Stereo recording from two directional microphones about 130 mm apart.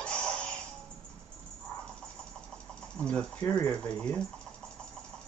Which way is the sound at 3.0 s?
10° left (ahead or behind).